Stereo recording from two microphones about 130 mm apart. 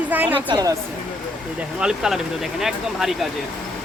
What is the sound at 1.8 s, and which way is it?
Speech, 5° right (ahead or behind).